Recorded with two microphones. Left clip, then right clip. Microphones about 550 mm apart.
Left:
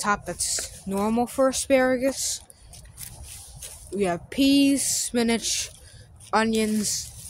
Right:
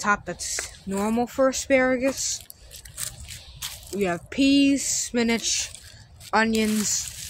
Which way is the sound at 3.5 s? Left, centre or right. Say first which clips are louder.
Even; left.